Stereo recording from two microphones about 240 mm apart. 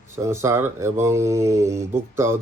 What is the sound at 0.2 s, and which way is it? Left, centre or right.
Speech, centre.